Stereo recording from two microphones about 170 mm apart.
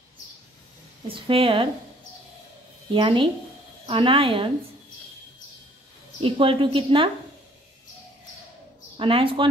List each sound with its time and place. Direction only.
1.0 s speech: 30° right (ahead or behind)
2.9 s speech: 30° right (ahead or behind)
6.2 s speech: 30° right (ahead or behind)
8.9 s speech: 30° right (ahead or behind)